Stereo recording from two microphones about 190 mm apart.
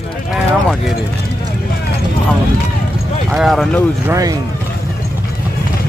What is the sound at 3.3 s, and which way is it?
Speech, centre (ahead or behind).